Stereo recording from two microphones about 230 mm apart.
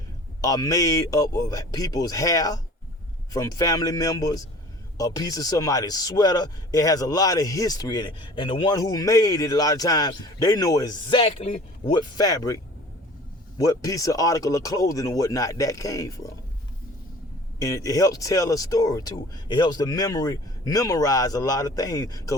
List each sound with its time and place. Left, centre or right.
0.4 s speech: centre
13.6 s speech: centre
17.6 s speech: centre